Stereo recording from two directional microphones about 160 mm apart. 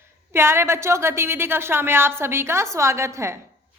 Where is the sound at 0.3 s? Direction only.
15° right (ahead or behind).